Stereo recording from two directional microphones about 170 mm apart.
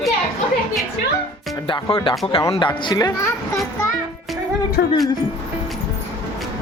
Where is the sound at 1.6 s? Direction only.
30° left (ahead or behind).